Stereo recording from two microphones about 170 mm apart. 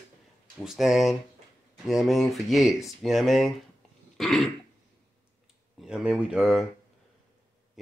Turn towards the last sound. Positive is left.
turn(degrees=-5)  # may be behind; listen again after turning